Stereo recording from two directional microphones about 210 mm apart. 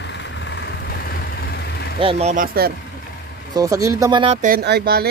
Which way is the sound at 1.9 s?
30° right (ahead or behind).